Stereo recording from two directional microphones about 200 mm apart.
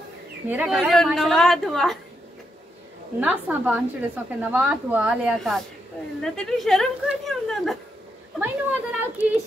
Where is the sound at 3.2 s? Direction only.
10° right (ahead or behind).